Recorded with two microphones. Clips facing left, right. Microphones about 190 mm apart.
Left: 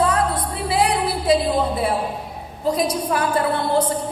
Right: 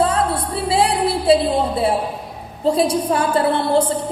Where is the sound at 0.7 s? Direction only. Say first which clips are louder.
Right 3 dB; 30° right (ahead or behind).